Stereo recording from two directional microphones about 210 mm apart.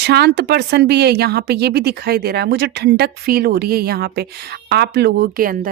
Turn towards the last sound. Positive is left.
turn(degrees=-40)  # may be behind; listen again after turning